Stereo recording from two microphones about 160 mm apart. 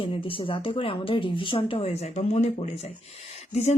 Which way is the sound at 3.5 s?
45° left (ahead or behind).